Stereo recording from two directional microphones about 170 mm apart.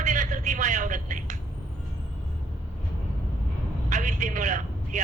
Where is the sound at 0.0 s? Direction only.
45° right (ahead or behind).